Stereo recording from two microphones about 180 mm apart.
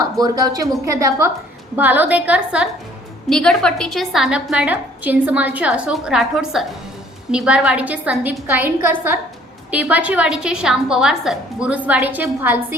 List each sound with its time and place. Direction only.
0.0 s a woman's voice: 20° right (ahead or behind)
3.2 s a woman's voice: 5° left (ahead or behind)